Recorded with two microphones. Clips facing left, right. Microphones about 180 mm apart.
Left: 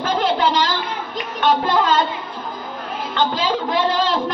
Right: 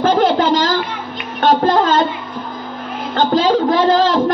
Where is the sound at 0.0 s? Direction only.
45° right (ahead or behind).